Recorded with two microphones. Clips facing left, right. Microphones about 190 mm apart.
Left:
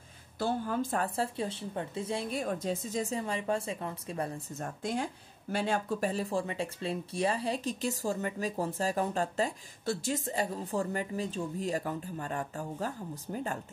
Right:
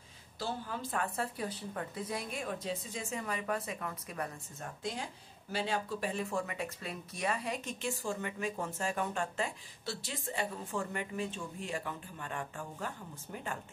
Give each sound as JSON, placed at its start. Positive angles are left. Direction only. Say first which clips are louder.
{"t": 0.4, "sound": "speech", "louder": "left 8 dB", "side_deg": 50}
{"t": 2.4, "sound": "speech", "louder": "left 5 dB", "side_deg": 45}
{"t": 4.6, "sound": "speech", "louder": "left 6 dB", "side_deg": 50}